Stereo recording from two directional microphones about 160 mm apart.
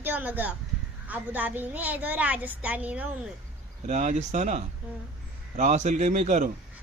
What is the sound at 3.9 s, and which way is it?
A man's voice, 45° right (ahead or behind).